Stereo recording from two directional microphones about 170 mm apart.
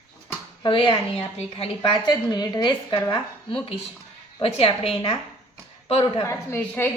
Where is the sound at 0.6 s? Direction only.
30° left (ahead or behind).